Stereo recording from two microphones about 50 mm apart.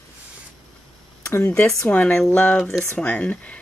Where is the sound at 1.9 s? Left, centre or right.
Left.